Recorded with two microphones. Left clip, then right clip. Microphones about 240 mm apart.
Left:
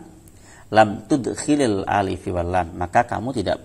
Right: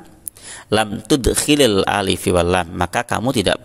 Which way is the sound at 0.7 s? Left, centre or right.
Right.